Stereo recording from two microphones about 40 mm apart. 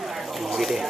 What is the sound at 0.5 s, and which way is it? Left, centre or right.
Speech, centre.